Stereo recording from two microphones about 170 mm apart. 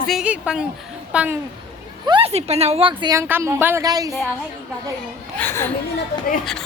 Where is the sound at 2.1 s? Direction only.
35° right (ahead or behind).